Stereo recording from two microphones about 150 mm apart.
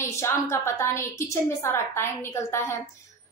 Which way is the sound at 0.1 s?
20° left (ahead or behind).